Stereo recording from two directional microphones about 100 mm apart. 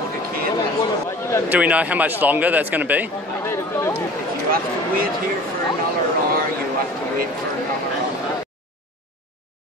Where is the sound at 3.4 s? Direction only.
25° left (ahead or behind).